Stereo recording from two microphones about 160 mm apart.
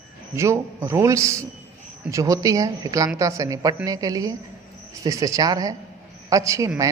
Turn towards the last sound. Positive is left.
turn(degrees=-20)  # may be behind; listen again after turning